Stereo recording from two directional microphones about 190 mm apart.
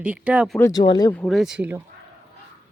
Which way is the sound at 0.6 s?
20° left (ahead or behind).